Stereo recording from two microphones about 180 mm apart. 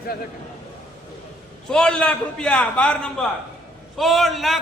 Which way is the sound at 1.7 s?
5° left (ahead or behind).